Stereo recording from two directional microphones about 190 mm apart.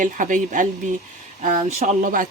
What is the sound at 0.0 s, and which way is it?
Speech, 45° right (ahead or behind).